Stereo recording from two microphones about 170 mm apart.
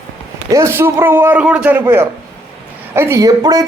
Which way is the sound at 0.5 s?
15° right (ahead or behind).